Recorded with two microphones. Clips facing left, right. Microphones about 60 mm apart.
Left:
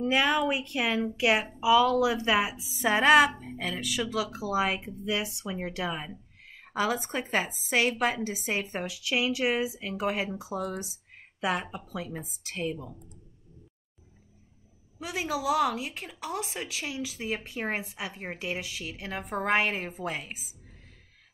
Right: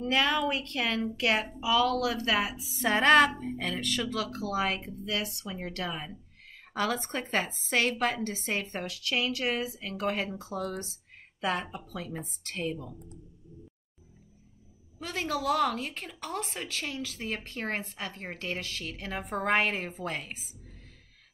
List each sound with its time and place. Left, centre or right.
0.0 s a woman's voice: centre
15.0 s a woman's voice: centre